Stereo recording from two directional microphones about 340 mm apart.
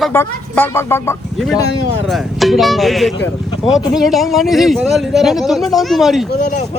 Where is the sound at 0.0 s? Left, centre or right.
Centre.